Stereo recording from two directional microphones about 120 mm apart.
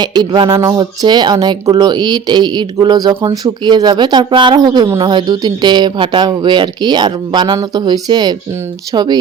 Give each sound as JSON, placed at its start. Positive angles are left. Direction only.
{"t": 0.0, "sound": "speech", "side_deg": -35}